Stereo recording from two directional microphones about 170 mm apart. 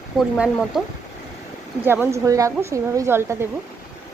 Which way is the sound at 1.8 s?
15° right (ahead or behind).